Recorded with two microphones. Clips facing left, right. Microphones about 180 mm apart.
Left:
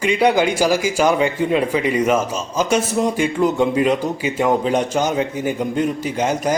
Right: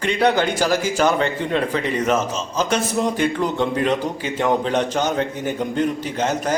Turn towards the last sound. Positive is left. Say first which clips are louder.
# left 2 dB
turn(degrees=10)  # may be behind; listen again after turning